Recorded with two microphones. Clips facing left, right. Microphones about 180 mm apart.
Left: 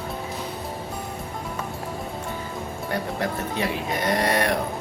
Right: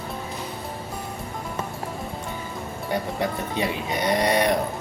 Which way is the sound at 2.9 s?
20° right (ahead or behind).